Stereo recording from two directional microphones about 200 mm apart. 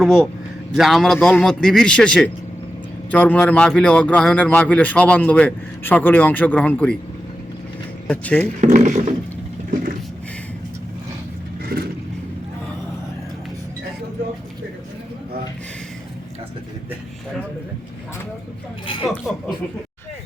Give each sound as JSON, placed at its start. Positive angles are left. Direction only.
{"t": 0.0, "sound": "a man's voice", "side_deg": 0}
{"t": 8.0, "sound": "speech", "side_deg": 5}
{"t": 8.6, "sound": "speech", "side_deg": -40}
{"t": 11.6, "sound": "vehicle", "side_deg": -50}
{"t": 19.0, "sound": "a man's voice", "side_deg": 0}